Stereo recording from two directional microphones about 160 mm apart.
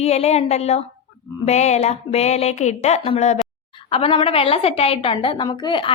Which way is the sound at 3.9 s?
35° left (ahead or behind).